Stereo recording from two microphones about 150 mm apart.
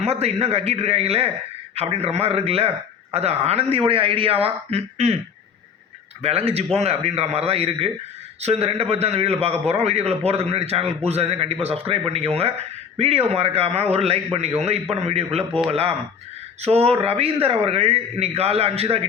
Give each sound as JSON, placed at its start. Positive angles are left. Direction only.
{"t": 0.0, "sound": "a man's voice", "side_deg": -45}
{"t": 6.2, "sound": "a man's voice", "side_deg": -45}